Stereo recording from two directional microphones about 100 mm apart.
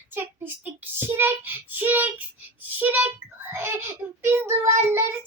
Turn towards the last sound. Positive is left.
turn(degrees=-25)  # may be behind; listen again after turning